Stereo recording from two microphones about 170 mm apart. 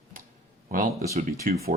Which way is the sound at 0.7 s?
50° right (ahead or behind).